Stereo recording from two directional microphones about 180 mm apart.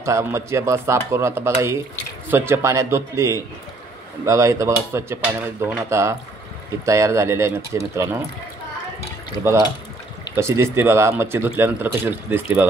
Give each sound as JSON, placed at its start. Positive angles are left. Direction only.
{"t": 0.0, "sound": "speech", "side_deg": -15}
{"t": 9.4, "sound": "speech", "side_deg": -15}